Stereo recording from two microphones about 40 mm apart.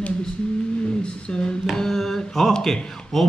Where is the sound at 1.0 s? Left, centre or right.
Left.